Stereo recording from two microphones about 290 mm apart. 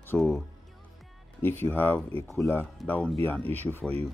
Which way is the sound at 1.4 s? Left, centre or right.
Centre.